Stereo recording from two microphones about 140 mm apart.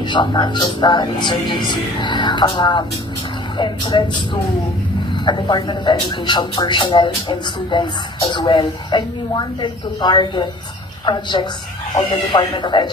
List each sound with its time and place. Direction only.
0.0 s speech: 30° left (ahead or behind)